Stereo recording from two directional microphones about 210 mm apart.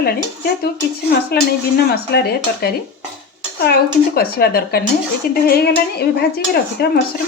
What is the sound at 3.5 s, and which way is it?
Speech, 50° left (ahead or behind).